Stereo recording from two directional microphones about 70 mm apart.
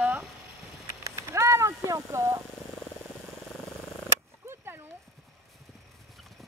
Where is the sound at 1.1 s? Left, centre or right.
Right.